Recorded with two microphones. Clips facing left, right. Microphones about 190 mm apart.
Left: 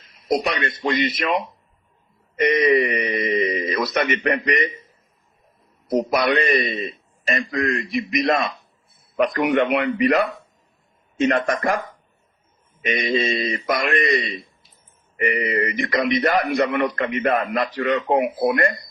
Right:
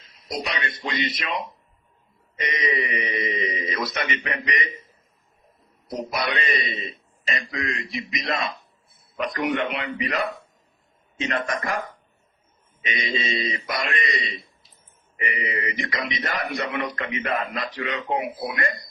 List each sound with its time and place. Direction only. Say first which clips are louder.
0.3 s a man's voice: left 8 dB; 55° left (ahead or behind)
2.4 s a man's voice: left 10 dB; 55° left (ahead or behind)
5.9 s a man's voice: left 8 dB; 65° left (ahead or behind)
11.2 s a man's voice: left 7 dB; 50° left (ahead or behind)
13.1 s a man's voice: left 5 dB; 55° left (ahead or behind)